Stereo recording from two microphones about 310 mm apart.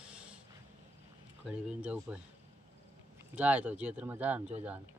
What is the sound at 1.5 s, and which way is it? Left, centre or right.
Speech, centre.